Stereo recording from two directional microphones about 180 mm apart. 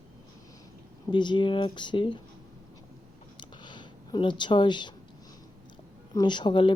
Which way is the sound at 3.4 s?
25° left (ahead or behind).